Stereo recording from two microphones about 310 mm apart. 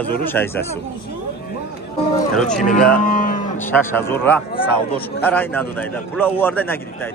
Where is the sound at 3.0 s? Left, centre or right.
Left.